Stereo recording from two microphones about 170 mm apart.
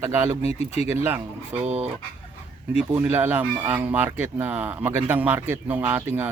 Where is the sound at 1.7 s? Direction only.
35° right (ahead or behind).